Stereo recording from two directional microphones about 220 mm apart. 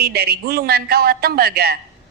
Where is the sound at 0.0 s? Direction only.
45° right (ahead or behind).